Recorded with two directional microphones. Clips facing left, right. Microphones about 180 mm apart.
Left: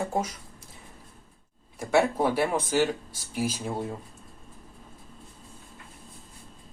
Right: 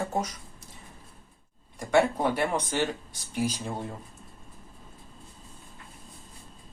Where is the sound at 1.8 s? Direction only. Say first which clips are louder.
Even; 5° left (ahead or behind).